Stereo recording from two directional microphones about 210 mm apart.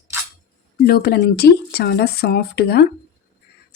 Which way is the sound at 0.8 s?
45° left (ahead or behind).